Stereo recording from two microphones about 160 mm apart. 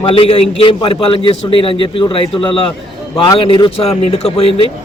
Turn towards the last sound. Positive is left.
turn(degrees=35)  # may be behind; listen again after turning